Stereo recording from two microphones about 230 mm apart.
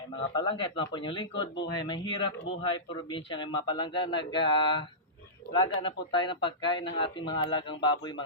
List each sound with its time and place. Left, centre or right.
0.3 s speech: left